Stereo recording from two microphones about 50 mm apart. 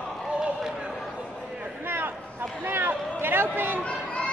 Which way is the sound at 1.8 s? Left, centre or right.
Right.